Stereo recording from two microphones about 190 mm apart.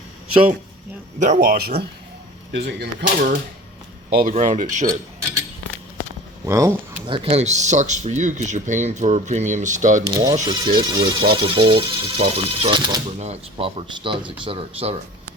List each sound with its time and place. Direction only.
1.2 s a man's voice: 45° right (ahead or behind); by 3.3 s 65° right (ahead or behind)
4.1 s speech: 45° right (ahead or behind)
6.4 s speech: 15° right (ahead or behind)
7.1 s speech: 30° right (ahead or behind)
10.1 s speech: 20° right (ahead or behind)